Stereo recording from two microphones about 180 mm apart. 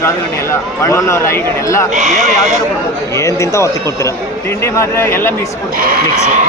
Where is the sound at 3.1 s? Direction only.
15° left (ahead or behind).